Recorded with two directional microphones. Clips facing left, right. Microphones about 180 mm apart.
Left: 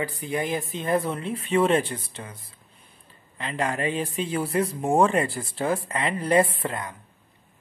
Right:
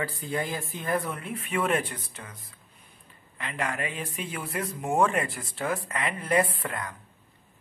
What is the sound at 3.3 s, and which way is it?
Speech, 30° left (ahead or behind).